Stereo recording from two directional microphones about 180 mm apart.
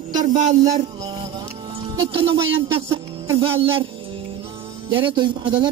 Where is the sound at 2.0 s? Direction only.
30° right (ahead or behind).